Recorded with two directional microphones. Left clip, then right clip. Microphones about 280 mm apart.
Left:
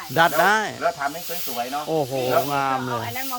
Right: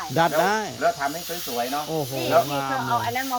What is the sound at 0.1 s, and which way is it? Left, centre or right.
Speech, centre.